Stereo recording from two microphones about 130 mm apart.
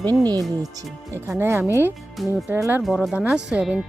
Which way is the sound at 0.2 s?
30° right (ahead or behind).